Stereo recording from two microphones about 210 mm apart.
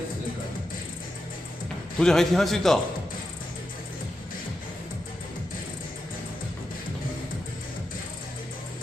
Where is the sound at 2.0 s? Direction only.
Centre (ahead or behind).